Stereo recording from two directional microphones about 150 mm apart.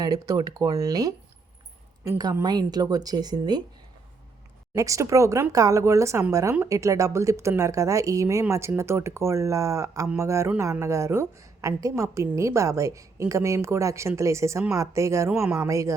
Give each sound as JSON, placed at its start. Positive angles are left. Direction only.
{"t": 0.0, "sound": "a woman's voice", "side_deg": -25}
{"t": 4.7, "sound": "a woman's voice", "side_deg": -20}
{"t": 15.3, "sound": "speech", "side_deg": -10}
{"t": 15.6, "sound": "a woman's voice", "side_deg": -20}